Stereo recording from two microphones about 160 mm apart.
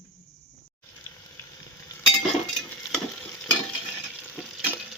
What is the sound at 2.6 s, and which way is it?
Stir, 5° left (ahead or behind).